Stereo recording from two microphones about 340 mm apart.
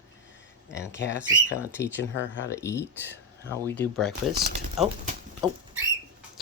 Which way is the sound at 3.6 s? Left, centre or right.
Centre.